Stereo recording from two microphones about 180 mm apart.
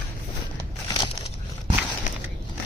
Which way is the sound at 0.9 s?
30° left (ahead or behind).